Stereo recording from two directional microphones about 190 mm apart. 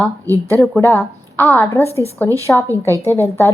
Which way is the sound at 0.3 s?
15° right (ahead or behind).